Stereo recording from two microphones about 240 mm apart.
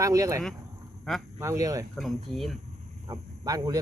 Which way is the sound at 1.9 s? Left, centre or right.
Centre.